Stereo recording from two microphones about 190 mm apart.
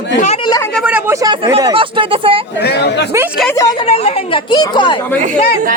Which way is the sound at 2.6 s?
60° left (ahead or behind).